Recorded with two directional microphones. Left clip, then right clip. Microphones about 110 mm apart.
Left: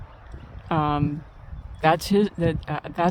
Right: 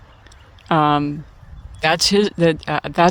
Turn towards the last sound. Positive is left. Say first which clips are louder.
# right 9 dB
turn(degrees=-60)  # may be behind; listen again after turning